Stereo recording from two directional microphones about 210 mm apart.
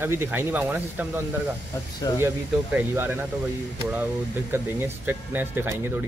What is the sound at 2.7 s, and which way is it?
Speech, 10° right (ahead or behind).